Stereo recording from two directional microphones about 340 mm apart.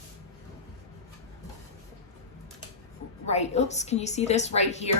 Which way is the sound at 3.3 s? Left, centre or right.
Centre.